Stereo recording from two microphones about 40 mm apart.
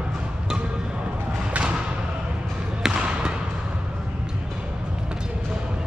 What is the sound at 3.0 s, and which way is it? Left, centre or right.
Basketball bounce, right.